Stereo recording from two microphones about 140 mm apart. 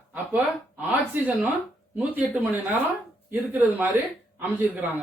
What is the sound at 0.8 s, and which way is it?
Speech, 10° right (ahead or behind).